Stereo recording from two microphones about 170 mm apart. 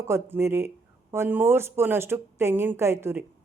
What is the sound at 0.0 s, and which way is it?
A woman's voice, 15° right (ahead or behind).